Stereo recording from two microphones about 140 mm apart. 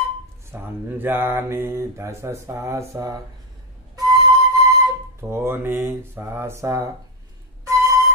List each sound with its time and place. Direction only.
0.5 s mantra: 15° right (ahead or behind)
3.9 s flute: 25° right (ahead or behind)
5.3 s speech: 15° right (ahead or behind)
7.6 s a sound: 25° right (ahead or behind)